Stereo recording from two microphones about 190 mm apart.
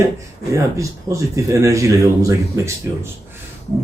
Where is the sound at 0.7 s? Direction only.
15° right (ahead or behind).